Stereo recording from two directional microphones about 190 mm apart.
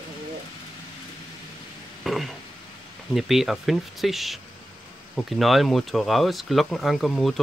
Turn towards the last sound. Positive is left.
turn(degrees=0)  # may be behind; listen again after turning